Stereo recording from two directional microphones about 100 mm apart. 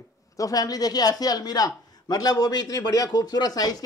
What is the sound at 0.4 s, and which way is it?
A man's voice, 35° left (ahead or behind).